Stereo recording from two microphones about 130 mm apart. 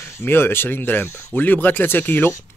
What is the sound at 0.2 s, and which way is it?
Speech, 15° left (ahead or behind).